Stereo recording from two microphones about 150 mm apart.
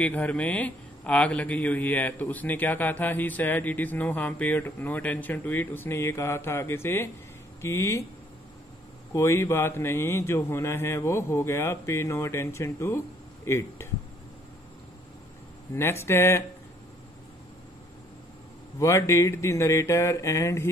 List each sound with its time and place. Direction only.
0.0 s speech: 10° left (ahead or behind)
9.1 s speech: 20° left (ahead or behind)
15.7 s speech: 15° left (ahead or behind)
18.8 s speech: 20° left (ahead or behind)